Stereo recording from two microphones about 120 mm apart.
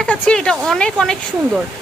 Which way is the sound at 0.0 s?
10° left (ahead or behind).